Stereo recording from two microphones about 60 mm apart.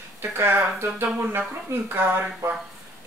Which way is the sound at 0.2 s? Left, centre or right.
Right.